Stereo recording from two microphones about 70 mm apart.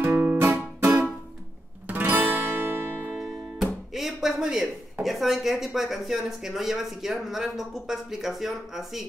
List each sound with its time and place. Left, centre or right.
0.1 s music: right
0.4 s music: right
1.9 s guitar: right
3.2 s music: centre
5.0 s speech: centre